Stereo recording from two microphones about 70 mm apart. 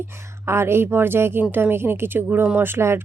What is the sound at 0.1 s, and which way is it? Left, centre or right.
A woman's voice, right.